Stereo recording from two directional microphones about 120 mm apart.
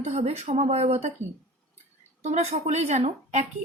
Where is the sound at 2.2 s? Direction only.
65° right (ahead or behind).